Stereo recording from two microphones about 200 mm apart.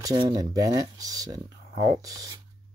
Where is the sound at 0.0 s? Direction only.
20° right (ahead or behind).